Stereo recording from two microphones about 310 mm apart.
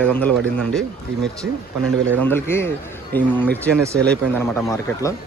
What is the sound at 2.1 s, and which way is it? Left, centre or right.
A man's voice, centre.